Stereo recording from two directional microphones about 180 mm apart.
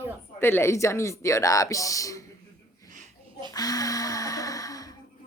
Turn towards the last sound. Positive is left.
turn(degrees=20)  # may be behind; listen again after turning